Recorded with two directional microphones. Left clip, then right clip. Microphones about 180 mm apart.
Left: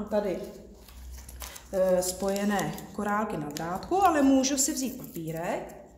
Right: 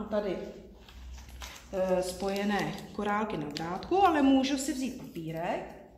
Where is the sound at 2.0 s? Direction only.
20° left (ahead or behind).